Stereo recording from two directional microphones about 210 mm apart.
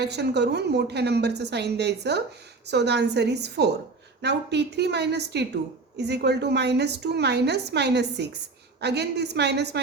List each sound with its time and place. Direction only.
0.0 s a woman's voice: 55° right (ahead or behind)